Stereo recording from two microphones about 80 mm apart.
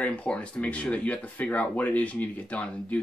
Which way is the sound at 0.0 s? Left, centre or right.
Centre.